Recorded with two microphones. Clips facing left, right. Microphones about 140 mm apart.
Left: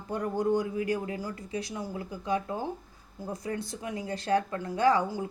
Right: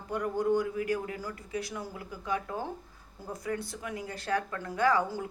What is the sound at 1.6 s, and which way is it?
Speech, 20° left (ahead or behind).